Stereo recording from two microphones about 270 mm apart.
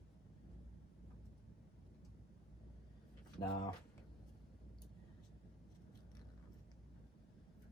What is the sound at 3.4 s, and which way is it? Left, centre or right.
Speech, centre.